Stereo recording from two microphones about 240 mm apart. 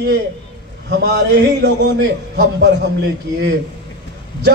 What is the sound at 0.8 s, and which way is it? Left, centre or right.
A man's voice, right.